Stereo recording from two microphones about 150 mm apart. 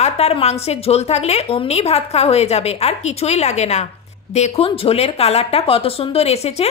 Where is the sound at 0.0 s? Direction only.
45° left (ahead or behind).